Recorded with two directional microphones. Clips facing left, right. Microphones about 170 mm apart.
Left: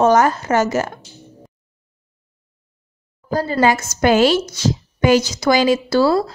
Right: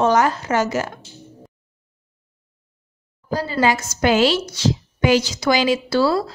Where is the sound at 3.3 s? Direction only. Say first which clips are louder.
Left 3 dB; 50° left (ahead or behind).